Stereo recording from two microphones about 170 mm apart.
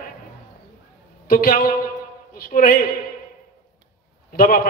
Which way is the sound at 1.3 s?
55° left (ahead or behind).